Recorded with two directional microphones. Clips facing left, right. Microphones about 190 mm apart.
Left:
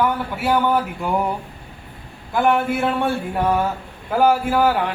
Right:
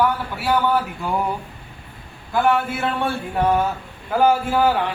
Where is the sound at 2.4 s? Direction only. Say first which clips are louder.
Left 1 dB; 15° left (ahead or behind).